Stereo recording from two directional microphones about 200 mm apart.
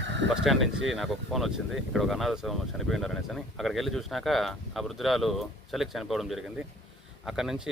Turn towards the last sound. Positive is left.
turn(degrees=0)  # may be behind; listen again after turning